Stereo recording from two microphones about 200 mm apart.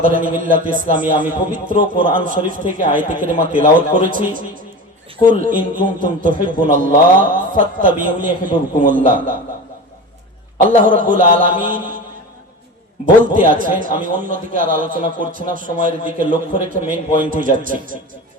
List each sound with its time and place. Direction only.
0.0 s a man's voice: 40° right (ahead or behind)
10.8 s a man's voice: 40° right (ahead or behind)
13.2 s a man's voice: 40° right (ahead or behind)